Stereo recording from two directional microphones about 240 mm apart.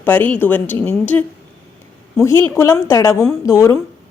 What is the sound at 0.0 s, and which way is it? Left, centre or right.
A woman's voice, centre.